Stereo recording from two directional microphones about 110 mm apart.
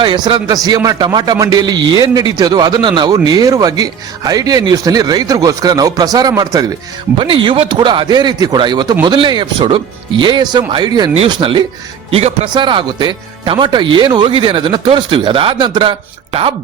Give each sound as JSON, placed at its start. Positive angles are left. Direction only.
{"t": 0.0, "sound": "speech", "side_deg": -45}
{"t": 7.2, "sound": "speech", "side_deg": -45}
{"t": 12.1, "sound": "speech", "side_deg": -75}
{"t": 12.5, "sound": "speech", "side_deg": -45}